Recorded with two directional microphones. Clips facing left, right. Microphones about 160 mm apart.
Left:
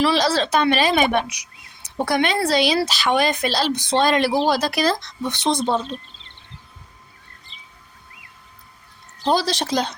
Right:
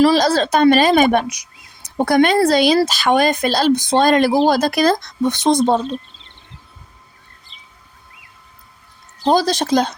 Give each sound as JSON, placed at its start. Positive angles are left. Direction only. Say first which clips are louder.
{"t": 0.0, "sound": "speech", "louder": "right 5 dB", "side_deg": -45}
{"t": 7.5, "sound": "bird", "louder": "even", "side_deg": 0}
{"t": 9.2, "sound": "speech", "louder": "right 5 dB", "side_deg": -45}